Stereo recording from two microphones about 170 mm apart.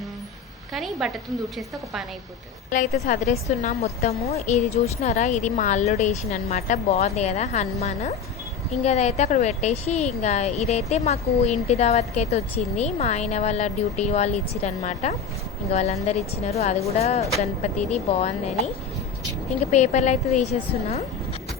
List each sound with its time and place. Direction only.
0.7 s a woman's voice: centre (ahead or behind)
2.7 s a woman's voice: 45° left (ahead or behind)
19.7 s a woman's voice: 40° left (ahead or behind)